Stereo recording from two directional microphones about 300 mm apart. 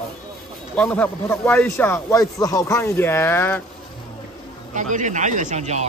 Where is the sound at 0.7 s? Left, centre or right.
Centre.